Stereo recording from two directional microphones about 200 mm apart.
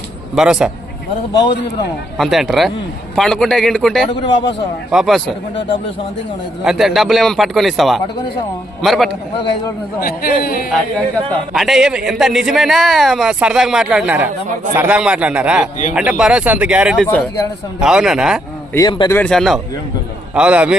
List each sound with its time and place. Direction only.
0.3 s a man's voice: 5° right (ahead or behind)
2.1 s a man's voice: centre (ahead or behind)
4.1 s a man's voice: 25° left (ahead or behind)
4.9 s a man's voice: centre (ahead or behind)
6.7 s a man's voice: centre (ahead or behind)
10.0 s a man's voice: 50° left (ahead or behind)
11.5 s a man's voice: centre (ahead or behind)
18.7 s a man's voice: 20° left (ahead or behind)
19.1 s a man's voice: 5° left (ahead or behind)